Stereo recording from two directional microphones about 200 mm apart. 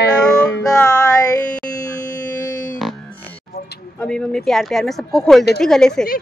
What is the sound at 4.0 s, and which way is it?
Speech, 5° left (ahead or behind).